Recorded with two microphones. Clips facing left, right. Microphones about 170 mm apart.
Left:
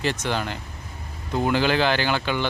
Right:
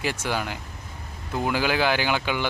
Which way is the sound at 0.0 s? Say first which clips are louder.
Left 2 dB; 10° right (ahead or behind).